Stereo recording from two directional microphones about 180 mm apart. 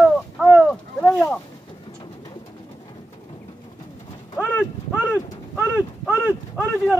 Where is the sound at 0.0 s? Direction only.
Centre (ahead or behind).